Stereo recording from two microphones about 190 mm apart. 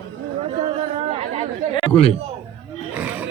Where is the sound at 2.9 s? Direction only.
10° right (ahead or behind).